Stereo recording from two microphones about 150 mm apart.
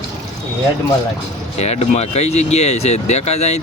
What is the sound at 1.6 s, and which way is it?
Speech, 45° left (ahead or behind).